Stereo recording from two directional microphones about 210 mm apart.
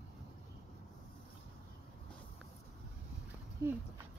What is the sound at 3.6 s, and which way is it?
Speech, 15° right (ahead or behind).